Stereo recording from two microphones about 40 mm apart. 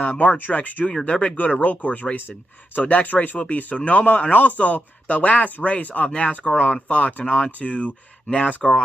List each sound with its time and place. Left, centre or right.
0.0 s speech: left
2.9 s speech: left
7.2 s speech: left